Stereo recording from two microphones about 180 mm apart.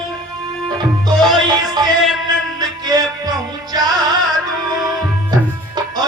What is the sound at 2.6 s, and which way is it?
Music, 20° right (ahead or behind).